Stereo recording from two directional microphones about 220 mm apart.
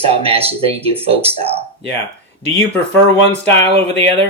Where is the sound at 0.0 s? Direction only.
25° right (ahead or behind).